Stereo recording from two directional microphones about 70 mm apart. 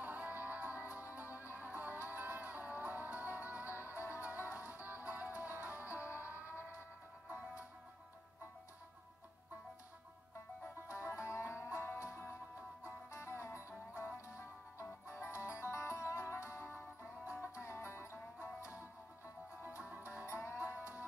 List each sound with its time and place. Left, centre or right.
0.0 s music: right
1.4 s music: left
1.7 s music: right
3.6 s music: left
4.7 s music: right
5.6 s music: left
6.3 s siren: left
10.9 s music: left
20.2 s music: left